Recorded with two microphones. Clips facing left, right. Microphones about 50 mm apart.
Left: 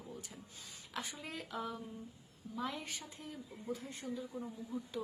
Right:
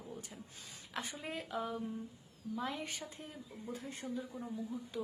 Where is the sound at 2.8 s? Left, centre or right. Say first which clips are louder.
Right 3 dB; right.